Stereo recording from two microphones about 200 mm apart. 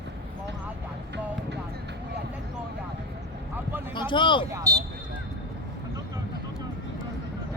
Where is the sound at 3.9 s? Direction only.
25° left (ahead or behind).